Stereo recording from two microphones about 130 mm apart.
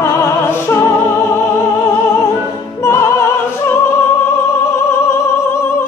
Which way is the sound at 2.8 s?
20° left (ahead or behind).